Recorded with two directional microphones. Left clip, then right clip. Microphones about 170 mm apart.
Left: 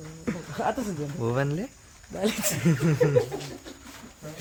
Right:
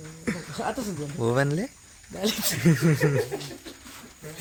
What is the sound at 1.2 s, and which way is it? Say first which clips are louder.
Speech: right 4 dB; 35° right (ahead or behind).